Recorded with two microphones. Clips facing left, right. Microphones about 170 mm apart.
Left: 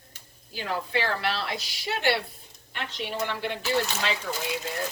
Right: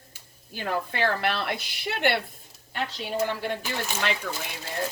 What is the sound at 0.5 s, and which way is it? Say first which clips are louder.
A woman's voice: even; 50° right (ahead or behind).